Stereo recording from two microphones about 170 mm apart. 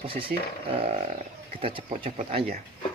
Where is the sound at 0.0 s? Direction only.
30° right (ahead or behind).